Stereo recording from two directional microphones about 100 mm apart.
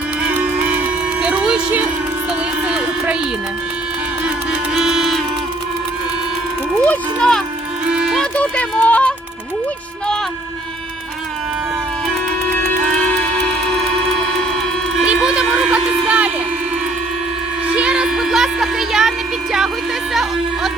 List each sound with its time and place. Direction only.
0.2 s music: 15° right (ahead or behind)
2.6 s a sound: 10° right (ahead or behind)
4.7 s music: 5° right (ahead or behind)
7.2 s speech: 5° left (ahead or behind)
7.9 s music: 10° right (ahead or behind)
8.4 s speech: 15° left (ahead or behind)
12.5 s music: 20° left (ahead or behind)
12.8 s music: centre (ahead or behind)
15.0 s a sound: 10° right (ahead or behind)
17.7 s a sound: 10° right (ahead or behind)